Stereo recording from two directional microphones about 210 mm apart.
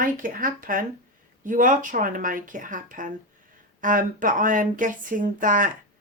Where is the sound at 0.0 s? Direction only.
40° right (ahead or behind).